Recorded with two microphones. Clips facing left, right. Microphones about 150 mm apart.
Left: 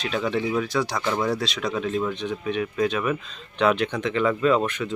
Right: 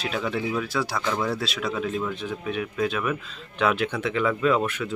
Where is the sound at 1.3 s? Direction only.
5° right (ahead or behind).